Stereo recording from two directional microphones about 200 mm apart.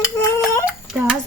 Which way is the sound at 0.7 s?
10° right (ahead or behind).